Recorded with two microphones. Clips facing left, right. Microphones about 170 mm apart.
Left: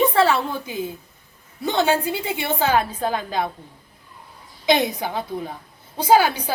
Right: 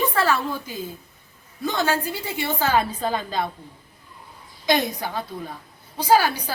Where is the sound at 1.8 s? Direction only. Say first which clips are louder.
Left 5 dB; 20° left (ahead or behind).